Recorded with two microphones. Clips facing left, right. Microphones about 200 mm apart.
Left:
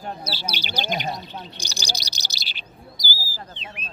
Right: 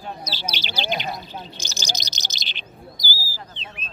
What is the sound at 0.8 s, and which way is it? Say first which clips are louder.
Speech: right 1 dB; 45° left (ahead or behind).